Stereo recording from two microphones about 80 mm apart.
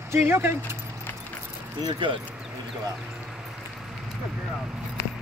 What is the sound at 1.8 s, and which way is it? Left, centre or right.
Speech, right.